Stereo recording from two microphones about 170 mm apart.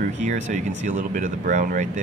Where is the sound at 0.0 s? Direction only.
45° right (ahead or behind).